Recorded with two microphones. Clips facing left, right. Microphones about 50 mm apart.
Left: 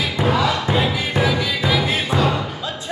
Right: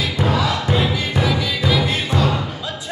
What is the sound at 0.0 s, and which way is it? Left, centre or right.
Music, centre.